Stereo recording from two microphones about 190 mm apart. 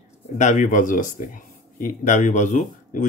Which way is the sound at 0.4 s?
40° left (ahead or behind).